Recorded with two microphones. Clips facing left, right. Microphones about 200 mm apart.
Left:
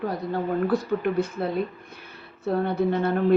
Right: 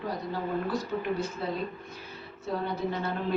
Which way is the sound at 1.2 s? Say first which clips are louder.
Left 7 dB; 55° left (ahead or behind).